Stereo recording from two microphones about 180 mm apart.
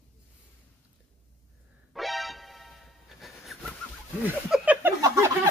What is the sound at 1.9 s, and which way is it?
Music, centre (ahead or behind).